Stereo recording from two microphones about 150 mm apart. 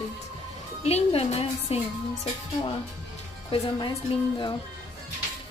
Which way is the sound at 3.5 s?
30° left (ahead or behind).